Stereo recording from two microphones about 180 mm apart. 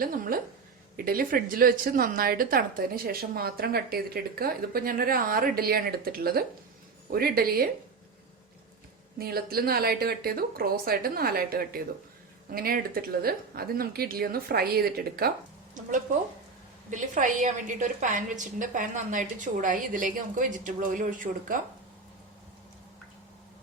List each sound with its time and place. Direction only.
0.0 s a woman's voice: 55° right (ahead or behind)
9.1 s a woman's voice: 55° right (ahead or behind)
15.8 s speech: 45° right (ahead or behind)